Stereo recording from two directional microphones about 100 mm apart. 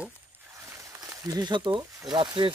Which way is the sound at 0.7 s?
35° right (ahead or behind).